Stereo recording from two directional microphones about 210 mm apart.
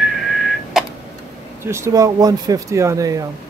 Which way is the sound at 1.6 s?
15° right (ahead or behind).